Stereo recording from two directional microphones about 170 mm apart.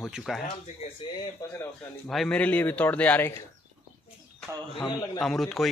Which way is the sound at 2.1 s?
5° left (ahead or behind).